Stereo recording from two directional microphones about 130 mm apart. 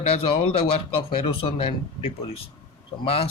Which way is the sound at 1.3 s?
45° left (ahead or behind).